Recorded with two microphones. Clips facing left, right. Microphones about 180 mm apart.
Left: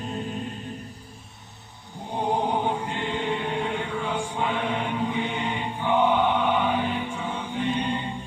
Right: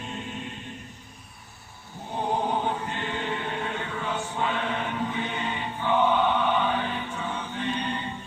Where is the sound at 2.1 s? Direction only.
15° left (ahead or behind).